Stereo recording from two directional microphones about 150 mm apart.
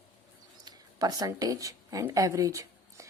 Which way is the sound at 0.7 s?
25° right (ahead or behind).